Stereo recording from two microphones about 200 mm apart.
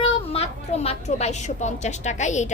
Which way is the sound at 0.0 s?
30° left (ahead or behind).